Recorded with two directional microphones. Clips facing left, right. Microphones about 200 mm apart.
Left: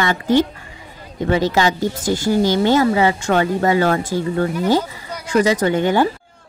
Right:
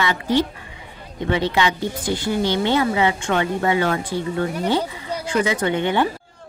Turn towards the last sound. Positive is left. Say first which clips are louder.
# left 4 dB
turn(degrees=40)  # may be behind; listen again after turning